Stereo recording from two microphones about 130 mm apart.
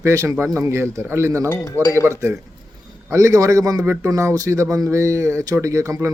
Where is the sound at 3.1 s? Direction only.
25° right (ahead or behind).